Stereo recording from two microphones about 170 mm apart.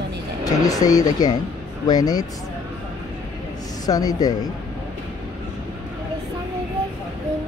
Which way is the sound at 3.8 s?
20° left (ahead or behind).